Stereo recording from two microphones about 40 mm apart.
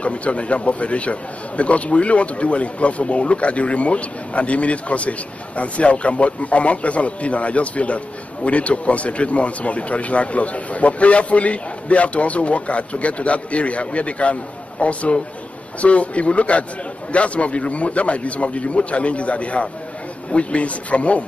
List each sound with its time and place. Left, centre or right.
0.0 s a man's voice: left